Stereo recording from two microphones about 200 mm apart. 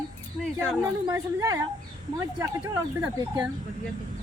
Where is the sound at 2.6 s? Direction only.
20° right (ahead or behind).